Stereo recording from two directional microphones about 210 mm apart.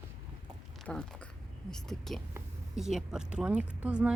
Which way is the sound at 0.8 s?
5° left (ahead or behind).